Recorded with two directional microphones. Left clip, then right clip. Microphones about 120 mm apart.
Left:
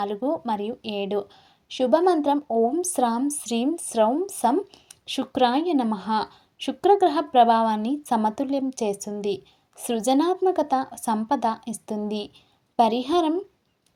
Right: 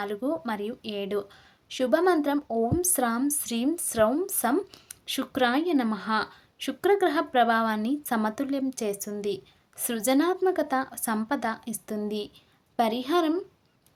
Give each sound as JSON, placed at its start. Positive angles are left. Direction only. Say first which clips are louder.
{"t": 0.0, "sound": "a woman's voice", "louder": "left 4 dB", "side_deg": 10}